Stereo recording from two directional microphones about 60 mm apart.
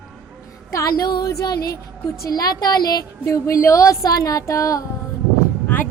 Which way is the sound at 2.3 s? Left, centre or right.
Left.